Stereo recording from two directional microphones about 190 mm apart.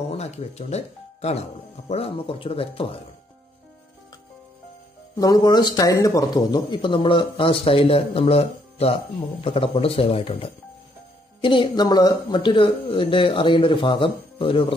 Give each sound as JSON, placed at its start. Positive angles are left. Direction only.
{"t": 0.1, "sound": "speech", "side_deg": 35}
{"t": 5.1, "sound": "speech", "side_deg": 20}